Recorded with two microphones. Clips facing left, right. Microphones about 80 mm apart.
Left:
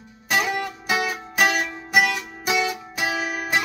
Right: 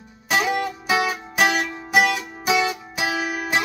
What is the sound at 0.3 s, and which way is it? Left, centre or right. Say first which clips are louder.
Music: right 2 dB; centre.